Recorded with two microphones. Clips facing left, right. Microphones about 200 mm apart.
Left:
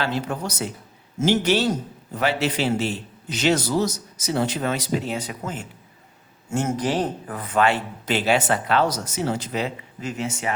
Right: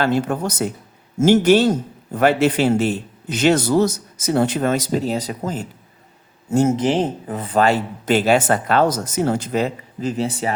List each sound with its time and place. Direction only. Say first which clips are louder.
0.0 s speech: right 7 dB; 50° right (ahead or behind); by 6.7 s 35° right (ahead or behind)
6.7 s speech: right 5 dB; 25° right (ahead or behind)